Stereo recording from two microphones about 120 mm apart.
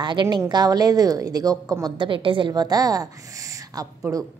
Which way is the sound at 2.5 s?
30° right (ahead or behind).